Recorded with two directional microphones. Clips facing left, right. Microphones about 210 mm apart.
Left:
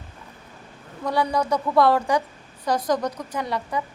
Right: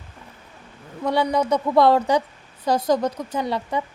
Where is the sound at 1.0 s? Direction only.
25° right (ahead or behind).